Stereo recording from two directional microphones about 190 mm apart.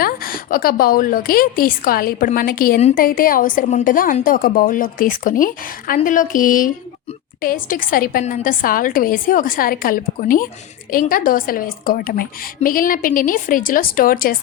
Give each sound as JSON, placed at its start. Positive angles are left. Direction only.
{"t": 0.0, "sound": "a woman's voice", "side_deg": 50}